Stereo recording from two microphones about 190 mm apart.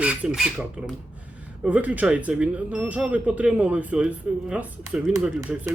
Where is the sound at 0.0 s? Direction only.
5° right (ahead or behind).